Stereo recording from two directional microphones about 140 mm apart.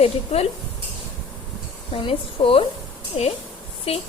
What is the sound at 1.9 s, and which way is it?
Speech, 40° left (ahead or behind).